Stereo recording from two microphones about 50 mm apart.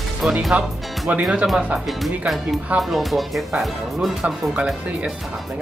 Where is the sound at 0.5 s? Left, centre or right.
Right.